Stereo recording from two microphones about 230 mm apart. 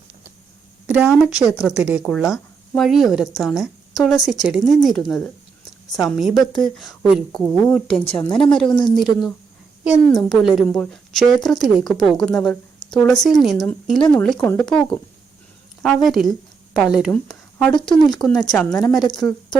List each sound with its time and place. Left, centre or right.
0.9 s a woman's voice: centre